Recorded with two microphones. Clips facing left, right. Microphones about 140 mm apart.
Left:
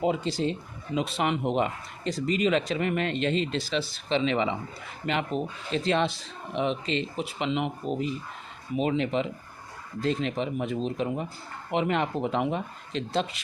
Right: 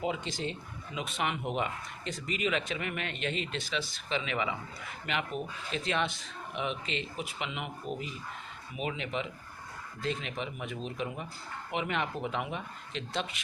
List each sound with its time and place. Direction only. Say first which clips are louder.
0.0 s speech: left 8 dB; 35° left (ahead or behind)